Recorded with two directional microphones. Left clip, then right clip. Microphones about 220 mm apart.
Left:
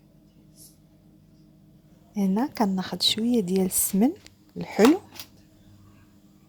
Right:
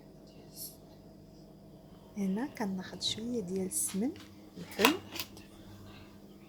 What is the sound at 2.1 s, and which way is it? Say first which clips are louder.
A woman's voice: left 10 dB; 20° left (ahead or behind).